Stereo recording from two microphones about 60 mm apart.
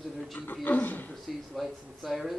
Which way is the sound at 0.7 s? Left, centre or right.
Left.